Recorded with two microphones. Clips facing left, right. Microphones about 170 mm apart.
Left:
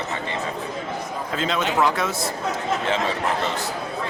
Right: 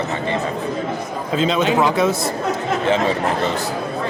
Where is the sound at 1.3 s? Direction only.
20° right (ahead or behind).